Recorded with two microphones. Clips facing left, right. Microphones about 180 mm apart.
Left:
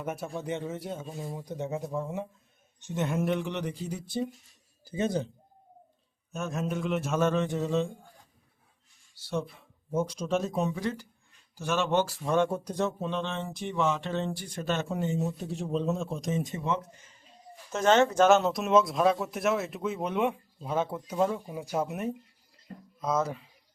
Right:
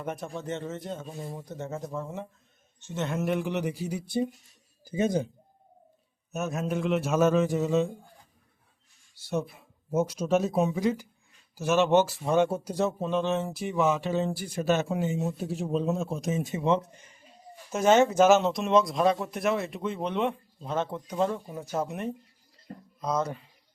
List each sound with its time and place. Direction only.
0.0 s speech: 5° left (ahead or behind)
3.2 s speech: 5° right (ahead or behind)
6.3 s speech: 5° right (ahead or behind)
9.3 s speech: 10° right (ahead or behind)
16.6 s speech: 20° right (ahead or behind)
17.7 s speech: 10° right (ahead or behind)